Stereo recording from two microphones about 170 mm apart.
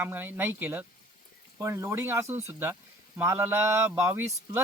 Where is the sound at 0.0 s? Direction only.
10° right (ahead or behind).